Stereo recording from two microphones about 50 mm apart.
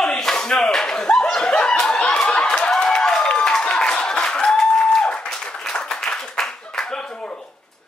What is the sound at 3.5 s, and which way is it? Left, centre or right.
Applause, centre.